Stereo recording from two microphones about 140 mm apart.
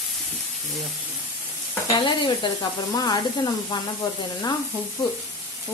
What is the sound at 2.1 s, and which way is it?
Speech, 35° left (ahead or behind).